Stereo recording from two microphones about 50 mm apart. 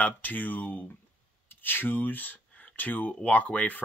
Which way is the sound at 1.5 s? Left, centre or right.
Left.